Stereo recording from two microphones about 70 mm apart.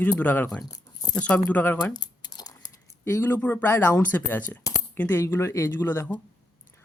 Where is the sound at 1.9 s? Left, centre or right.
Left.